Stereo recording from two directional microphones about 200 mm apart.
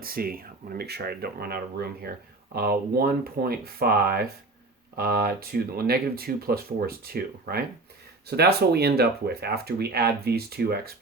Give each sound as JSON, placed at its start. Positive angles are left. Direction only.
{"t": 0.0, "sound": "speech", "side_deg": -45}